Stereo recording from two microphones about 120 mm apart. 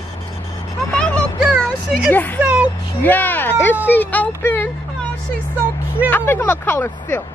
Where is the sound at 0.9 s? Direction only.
10° left (ahead or behind).